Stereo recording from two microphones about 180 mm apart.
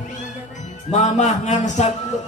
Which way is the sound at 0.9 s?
40° left (ahead or behind).